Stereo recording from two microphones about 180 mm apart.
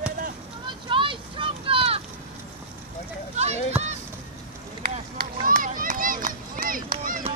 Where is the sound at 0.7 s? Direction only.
30° right (ahead or behind).